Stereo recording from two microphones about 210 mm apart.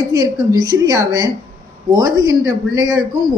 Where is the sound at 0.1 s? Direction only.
15° right (ahead or behind).